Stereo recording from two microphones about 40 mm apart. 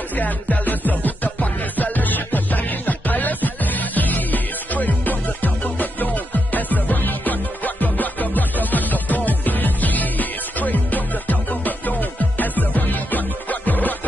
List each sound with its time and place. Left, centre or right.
0.1 s music: left